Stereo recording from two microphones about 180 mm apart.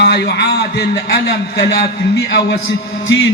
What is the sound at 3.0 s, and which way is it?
Music, 90° left.